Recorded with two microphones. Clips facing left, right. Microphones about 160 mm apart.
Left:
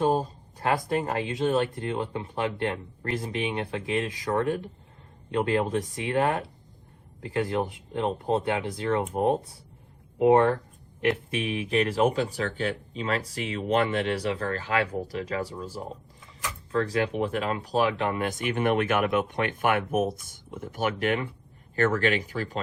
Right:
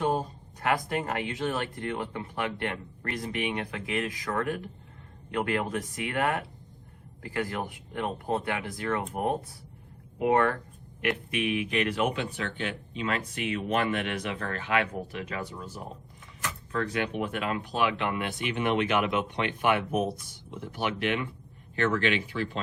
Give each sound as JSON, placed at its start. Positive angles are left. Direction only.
{"t": 0.6, "sound": "speech", "side_deg": 25}